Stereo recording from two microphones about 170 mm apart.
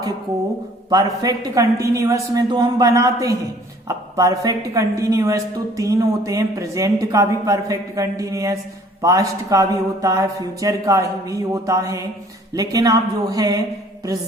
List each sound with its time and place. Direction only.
0.9 s a woman's voice: 20° right (ahead or behind)